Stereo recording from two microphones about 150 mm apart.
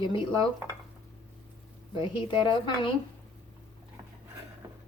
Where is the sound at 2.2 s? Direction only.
30° left (ahead or behind).